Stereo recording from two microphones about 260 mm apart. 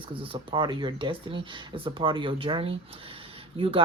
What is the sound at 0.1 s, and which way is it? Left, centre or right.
Speech, centre.